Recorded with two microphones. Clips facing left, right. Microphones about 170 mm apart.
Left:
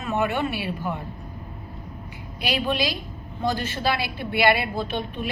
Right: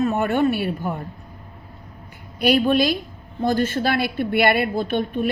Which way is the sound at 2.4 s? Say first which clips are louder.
Right 8 dB; 50° right (ahead or behind).